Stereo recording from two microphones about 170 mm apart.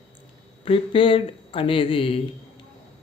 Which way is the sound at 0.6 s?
30° left (ahead or behind).